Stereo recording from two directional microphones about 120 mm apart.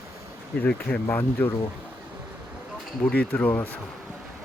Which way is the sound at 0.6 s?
15° left (ahead or behind).